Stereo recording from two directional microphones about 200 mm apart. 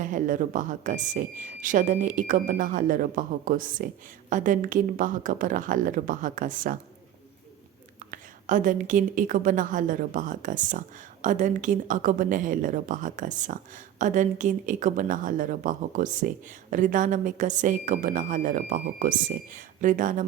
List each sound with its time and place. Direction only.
0.0 s a woman's voice: 40° right (ahead or behind)
8.1 s a woman's voice: 40° right (ahead or behind)